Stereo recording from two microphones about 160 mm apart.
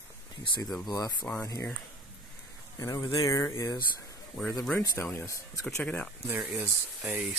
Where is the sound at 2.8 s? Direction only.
20° left (ahead or behind).